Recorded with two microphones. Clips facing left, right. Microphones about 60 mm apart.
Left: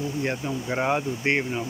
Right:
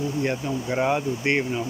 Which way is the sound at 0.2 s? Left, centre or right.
Centre.